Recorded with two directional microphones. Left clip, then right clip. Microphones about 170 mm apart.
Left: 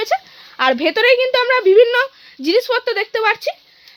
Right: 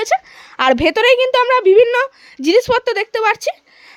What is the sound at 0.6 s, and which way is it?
A woman's voice, 35° right (ahead or behind).